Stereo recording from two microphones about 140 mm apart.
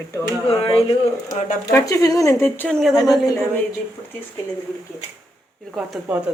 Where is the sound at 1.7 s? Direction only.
25° left (ahead or behind).